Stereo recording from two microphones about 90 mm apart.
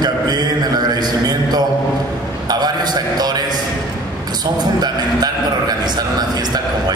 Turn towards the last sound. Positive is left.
turn(degrees=-50)  # may be behind; listen again after turning